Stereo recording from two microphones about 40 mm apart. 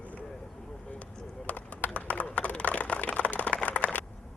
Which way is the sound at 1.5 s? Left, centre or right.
Left.